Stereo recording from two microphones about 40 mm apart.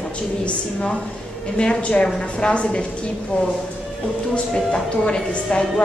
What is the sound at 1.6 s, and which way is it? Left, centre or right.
A woman's voice, left.